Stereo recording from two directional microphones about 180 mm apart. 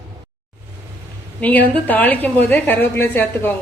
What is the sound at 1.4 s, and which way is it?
A woman's voice, 10° left (ahead or behind).